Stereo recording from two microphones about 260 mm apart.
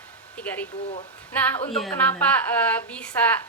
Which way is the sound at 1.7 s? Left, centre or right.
Centre.